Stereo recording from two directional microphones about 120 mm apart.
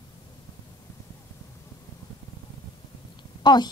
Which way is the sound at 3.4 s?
35° left (ahead or behind).